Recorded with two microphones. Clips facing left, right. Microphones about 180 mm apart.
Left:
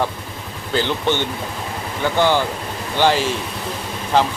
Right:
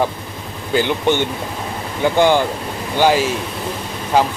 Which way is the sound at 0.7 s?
15° right (ahead or behind).